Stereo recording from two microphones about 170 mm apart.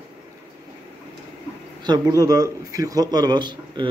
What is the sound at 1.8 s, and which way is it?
A man's voice, 25° right (ahead or behind).